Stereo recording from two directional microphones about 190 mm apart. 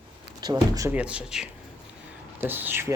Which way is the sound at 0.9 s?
5° right (ahead or behind).